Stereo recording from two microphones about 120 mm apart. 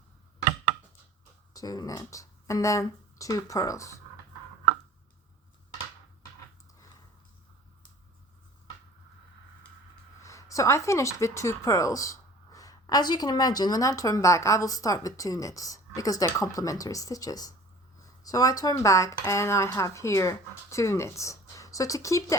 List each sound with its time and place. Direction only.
1.5 s speech: 30° left (ahead or behind)
10.2 s speech: 25° left (ahead or behind)